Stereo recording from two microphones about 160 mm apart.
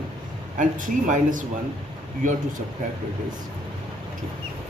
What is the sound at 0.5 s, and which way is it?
Speech, 55° right (ahead or behind).